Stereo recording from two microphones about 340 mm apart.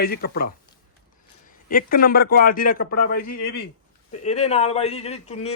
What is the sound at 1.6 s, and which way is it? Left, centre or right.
A man's voice, left.